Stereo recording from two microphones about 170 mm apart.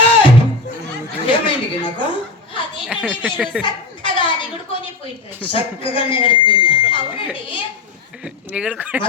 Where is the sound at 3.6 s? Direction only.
30° left (ahead or behind).